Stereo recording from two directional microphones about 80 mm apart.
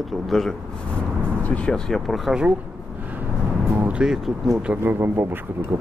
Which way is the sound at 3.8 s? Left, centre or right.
Centre.